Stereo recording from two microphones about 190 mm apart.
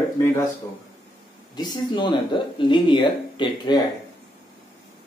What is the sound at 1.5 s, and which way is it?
Speech, 25° left (ahead or behind).